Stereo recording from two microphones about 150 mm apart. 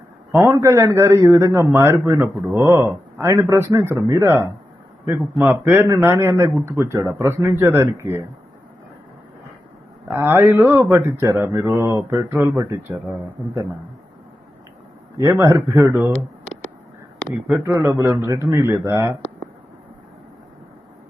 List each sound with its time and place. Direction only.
0.3 s a man's voice: 20° right (ahead or behind)
10.1 s speech: 15° right (ahead or behind)
15.2 s a man's voice: 20° right (ahead or behind)
17.5 s a man's voice: 20° right (ahead or behind)